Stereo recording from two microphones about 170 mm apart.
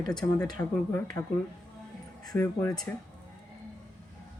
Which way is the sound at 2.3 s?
15° left (ahead or behind).